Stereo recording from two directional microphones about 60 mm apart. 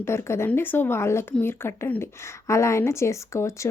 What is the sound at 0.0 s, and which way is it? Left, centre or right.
A woman's voice, left.